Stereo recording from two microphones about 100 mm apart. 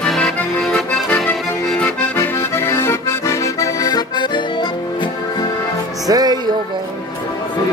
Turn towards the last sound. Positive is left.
turn(degrees=-40)  # may be behind; listen again after turning